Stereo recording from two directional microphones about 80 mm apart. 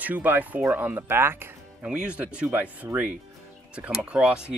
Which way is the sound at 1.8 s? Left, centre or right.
Centre.